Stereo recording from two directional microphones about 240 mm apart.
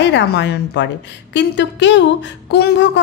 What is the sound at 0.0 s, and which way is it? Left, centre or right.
Speech, left.